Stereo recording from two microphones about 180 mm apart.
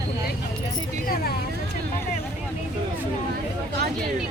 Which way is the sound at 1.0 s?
60° left (ahead or behind).